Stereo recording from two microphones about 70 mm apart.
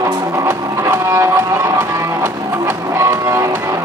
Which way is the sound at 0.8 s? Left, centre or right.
Right.